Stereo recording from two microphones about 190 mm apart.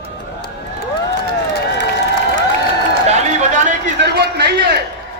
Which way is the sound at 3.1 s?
35° right (ahead or behind).